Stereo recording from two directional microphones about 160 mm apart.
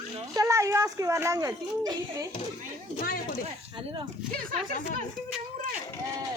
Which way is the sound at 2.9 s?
60° left (ahead or behind).